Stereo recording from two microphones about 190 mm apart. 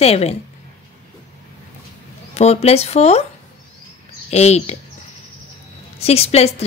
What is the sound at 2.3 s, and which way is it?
Speech, 35° left (ahead or behind).